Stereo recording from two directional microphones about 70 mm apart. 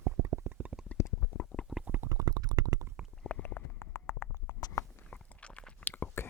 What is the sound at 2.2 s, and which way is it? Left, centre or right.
Stomach rumble, right.